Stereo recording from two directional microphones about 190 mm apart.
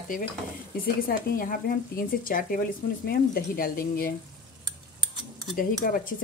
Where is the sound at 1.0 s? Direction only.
50° left (ahead or behind).